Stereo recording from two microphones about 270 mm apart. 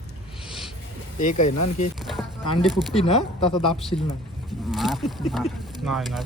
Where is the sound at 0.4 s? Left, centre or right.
Centre.